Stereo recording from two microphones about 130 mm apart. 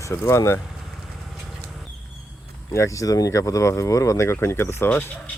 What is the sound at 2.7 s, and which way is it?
Speech, 25° left (ahead or behind).